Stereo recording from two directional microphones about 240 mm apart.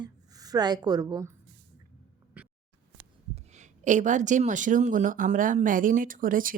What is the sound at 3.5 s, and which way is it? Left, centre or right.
Speech, right.